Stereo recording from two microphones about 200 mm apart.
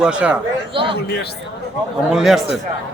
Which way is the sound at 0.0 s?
5° right (ahead or behind).